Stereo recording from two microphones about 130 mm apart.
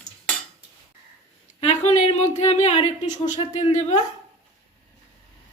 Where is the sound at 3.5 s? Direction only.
65° left (ahead or behind).